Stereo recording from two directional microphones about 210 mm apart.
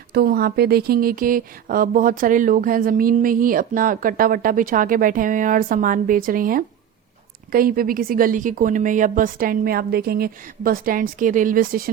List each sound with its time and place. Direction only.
0.1 s speech: 45° right (ahead or behind)